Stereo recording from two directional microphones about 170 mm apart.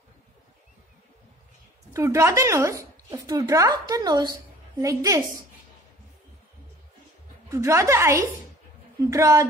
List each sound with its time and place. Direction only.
2.0 s a woman's voice: 15° right (ahead or behind)
7.4 s a woman's voice: 15° right (ahead or behind)